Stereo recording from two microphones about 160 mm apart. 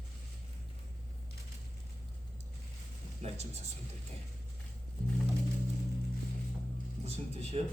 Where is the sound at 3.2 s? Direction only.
45° right (ahead or behind).